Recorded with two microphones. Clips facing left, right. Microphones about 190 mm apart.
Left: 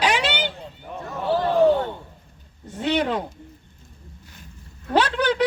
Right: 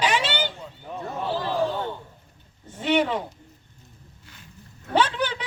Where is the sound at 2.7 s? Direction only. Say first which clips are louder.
Even; 70° left (ahead or behind).